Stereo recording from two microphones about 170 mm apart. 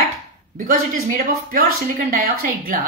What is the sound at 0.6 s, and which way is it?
A woman's voice, 55° right (ahead or behind).